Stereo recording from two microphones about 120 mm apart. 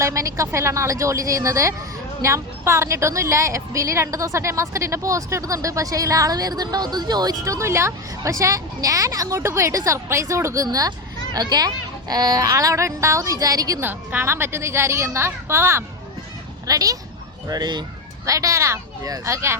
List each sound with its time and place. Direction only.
0.0 s a woman's voice: 25° right (ahead or behind)
13.8 s a woman's voice: 15° right (ahead or behind)